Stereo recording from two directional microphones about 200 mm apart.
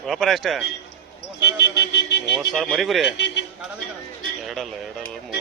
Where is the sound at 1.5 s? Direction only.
60° left (ahead or behind).